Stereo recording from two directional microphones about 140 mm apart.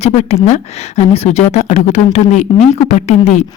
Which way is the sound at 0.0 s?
50° left (ahead or behind).